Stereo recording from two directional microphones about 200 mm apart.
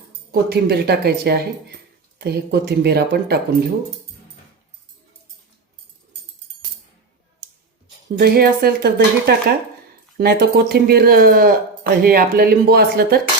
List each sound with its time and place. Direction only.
0.3 s speech: 55° right (ahead or behind)
8.2 s speech: 50° right (ahead or behind)